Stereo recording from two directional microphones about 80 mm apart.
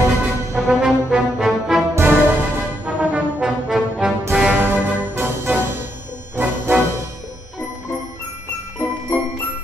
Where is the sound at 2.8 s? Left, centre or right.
Centre.